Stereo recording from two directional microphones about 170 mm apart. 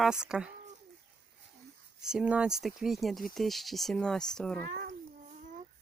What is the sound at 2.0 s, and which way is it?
Speech, 5° right (ahead or behind).